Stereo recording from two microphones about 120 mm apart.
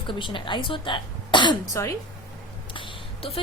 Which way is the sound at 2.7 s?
50° left (ahead or behind).